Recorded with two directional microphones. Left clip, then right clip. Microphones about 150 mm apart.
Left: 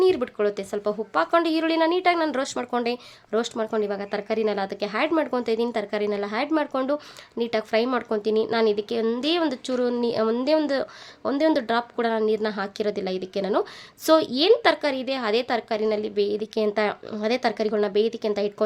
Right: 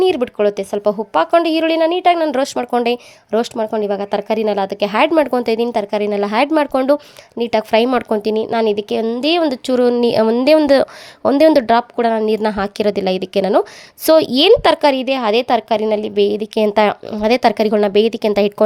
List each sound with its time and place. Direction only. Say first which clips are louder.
0.0 s speech: right 7 dB; 45° right (ahead or behind)
3.9 s speech: right 9 dB; 50° right (ahead or behind)